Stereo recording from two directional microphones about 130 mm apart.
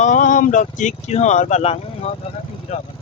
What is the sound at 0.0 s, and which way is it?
Speech, 75° left (ahead or behind).